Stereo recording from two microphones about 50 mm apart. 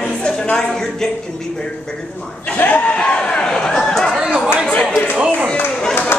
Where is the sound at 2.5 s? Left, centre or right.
Left.